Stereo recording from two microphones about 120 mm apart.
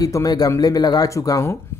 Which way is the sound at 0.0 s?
30° left (ahead or behind).